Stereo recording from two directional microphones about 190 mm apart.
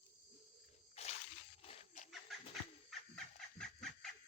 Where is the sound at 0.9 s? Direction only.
35° left (ahead or behind).